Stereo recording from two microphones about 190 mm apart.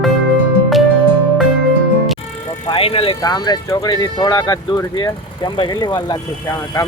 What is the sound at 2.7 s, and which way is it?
Speech, 30° left (ahead or behind).